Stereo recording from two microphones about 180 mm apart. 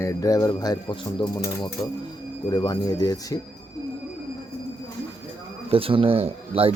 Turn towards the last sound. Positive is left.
turn(degrees=-30)  # may be behind; listen again after turning